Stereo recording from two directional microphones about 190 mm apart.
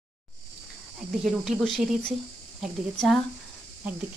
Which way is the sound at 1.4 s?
5° left (ahead or behind).